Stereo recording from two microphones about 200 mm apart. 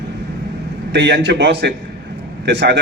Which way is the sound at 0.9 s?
60° right (ahead or behind).